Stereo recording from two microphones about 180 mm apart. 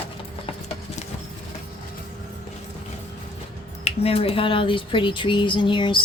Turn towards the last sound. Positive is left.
turn(degrees=25)  # may be behind; listen again after turning